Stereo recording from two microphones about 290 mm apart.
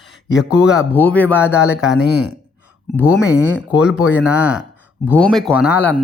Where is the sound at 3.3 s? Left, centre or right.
Centre.